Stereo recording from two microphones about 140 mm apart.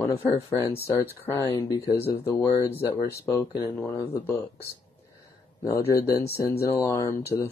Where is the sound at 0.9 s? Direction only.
25° left (ahead or behind).